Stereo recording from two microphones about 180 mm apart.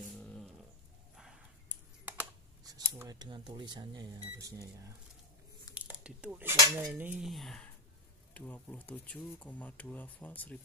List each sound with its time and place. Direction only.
0.2 s a sound: 5° left (ahead or behind)
2.6 s speech: 20° right (ahead or behind)
5.8 s squish: 5° right (ahead or behind)
6.6 s cutlery: 15° right (ahead or behind); by 7.7 s centre (ahead or behind)
8.3 s speech: 10° left (ahead or behind)